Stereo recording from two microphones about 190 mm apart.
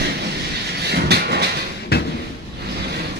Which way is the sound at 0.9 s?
60° right (ahead or behind).